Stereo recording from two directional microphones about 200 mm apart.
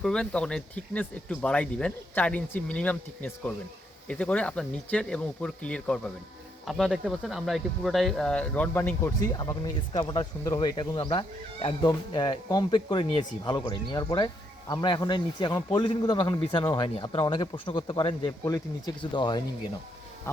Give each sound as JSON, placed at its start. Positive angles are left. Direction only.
{"t": 0.0, "sound": "a man's voice", "side_deg": 5}